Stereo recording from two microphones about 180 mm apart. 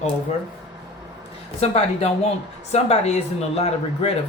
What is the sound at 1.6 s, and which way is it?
Speech, 35° left (ahead or behind).